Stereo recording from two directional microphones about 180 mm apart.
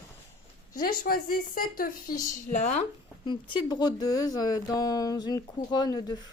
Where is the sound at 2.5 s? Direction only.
40° left (ahead or behind).